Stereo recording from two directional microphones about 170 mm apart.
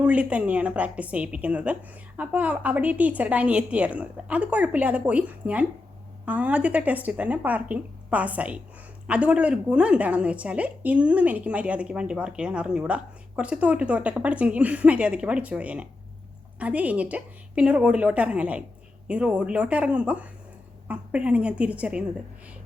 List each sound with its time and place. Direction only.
0.0 s a woman's voice: 5° right (ahead or behind)